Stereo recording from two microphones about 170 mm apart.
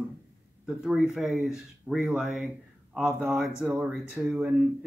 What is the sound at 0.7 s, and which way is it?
Speech, 5° right (ahead or behind).